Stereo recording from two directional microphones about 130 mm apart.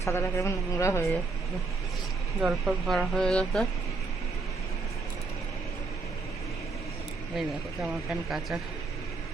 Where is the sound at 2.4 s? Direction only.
5° right (ahead or behind).